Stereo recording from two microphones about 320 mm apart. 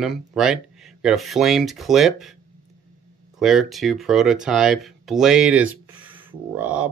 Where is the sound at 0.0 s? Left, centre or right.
Centre.